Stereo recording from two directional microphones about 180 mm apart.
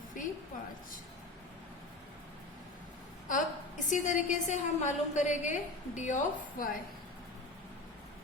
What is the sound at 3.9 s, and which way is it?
A woman's voice, 40° left (ahead or behind).